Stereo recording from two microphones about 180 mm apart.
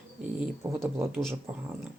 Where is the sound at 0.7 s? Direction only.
15° right (ahead or behind).